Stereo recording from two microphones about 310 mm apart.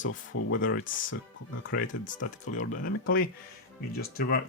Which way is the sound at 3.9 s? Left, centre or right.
Left.